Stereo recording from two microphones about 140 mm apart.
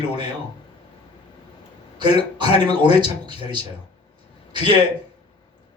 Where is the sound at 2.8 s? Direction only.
35° right (ahead or behind).